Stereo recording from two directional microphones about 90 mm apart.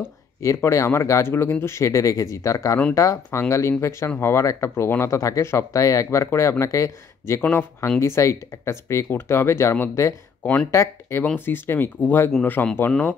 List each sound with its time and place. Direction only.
0.0 s speech: 30° left (ahead or behind)
10.4 s speech: 15° left (ahead or behind)
10.7 s speech: 30° left (ahead or behind)